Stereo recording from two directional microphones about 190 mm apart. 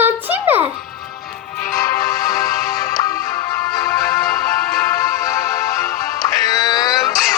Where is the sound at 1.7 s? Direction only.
20° left (ahead or behind).